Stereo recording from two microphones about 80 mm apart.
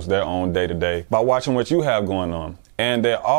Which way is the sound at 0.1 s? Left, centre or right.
Centre.